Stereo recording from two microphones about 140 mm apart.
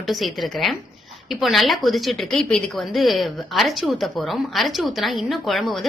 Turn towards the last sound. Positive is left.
turn(degrees=0)  # may be behind; listen again after turning